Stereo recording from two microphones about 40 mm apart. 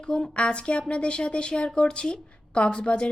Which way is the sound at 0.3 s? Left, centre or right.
Left.